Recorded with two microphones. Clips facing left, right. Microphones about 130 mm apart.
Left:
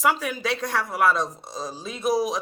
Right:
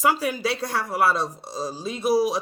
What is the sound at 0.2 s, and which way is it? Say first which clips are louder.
Speech: right 2 dB; 35° right (ahead or behind).